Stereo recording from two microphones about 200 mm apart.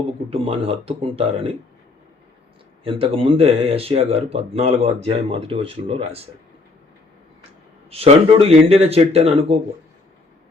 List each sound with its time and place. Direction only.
0.3 s speech: 30° right (ahead or behind)
2.8 s speech: 25° right (ahead or behind)
7.9 s speech: 30° right (ahead or behind)